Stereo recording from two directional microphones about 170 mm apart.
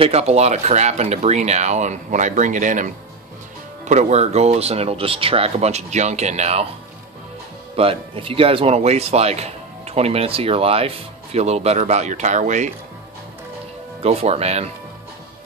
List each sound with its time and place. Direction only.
0.0 s speech: 40° right (ahead or behind)
7.7 s speech: 35° right (ahead or behind)
14.0 s speech: 40° right (ahead or behind)